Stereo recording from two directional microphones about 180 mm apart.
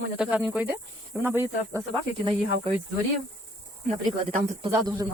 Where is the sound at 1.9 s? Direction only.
25° right (ahead or behind).